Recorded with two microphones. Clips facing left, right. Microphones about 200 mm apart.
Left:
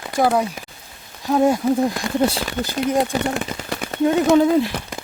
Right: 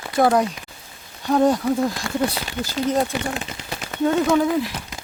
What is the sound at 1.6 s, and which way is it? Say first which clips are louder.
Speech: left 3 dB; 25° left (ahead or behind).